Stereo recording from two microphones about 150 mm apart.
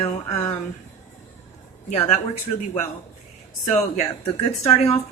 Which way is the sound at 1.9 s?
45° left (ahead or behind).